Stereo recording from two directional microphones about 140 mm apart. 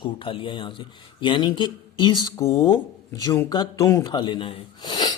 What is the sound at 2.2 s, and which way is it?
Speech, 20° left (ahead or behind).